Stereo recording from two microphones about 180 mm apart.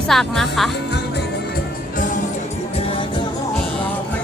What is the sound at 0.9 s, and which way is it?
Music, 65° left (ahead or behind).